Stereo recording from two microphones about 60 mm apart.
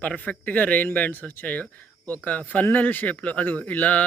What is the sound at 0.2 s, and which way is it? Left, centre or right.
Speech, left.